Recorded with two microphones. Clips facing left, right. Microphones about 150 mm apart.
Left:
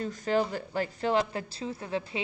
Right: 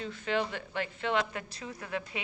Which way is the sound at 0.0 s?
40° left (ahead or behind).